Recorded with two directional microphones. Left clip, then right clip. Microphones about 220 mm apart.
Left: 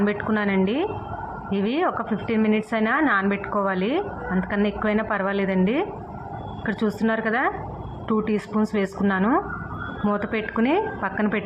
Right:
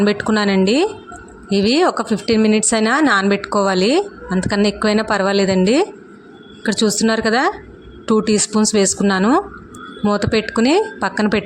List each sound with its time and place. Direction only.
0.0 s speech: 55° right (ahead or behind)